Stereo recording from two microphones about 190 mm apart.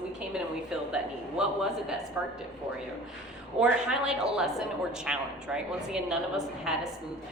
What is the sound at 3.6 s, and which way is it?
A woman's voice, 5° right (ahead or behind).